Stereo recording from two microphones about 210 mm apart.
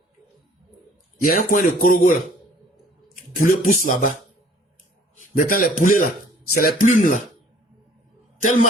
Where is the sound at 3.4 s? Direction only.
40° left (ahead or behind).